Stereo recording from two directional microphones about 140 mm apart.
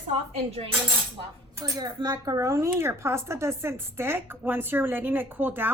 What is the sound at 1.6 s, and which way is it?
A woman's voice, 30° right (ahead or behind).